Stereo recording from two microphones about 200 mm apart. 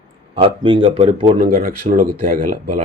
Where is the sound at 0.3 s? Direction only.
25° right (ahead or behind).